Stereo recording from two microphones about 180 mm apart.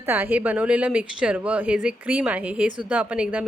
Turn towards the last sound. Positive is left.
turn(degrees=-5)  # may be behind; listen again after turning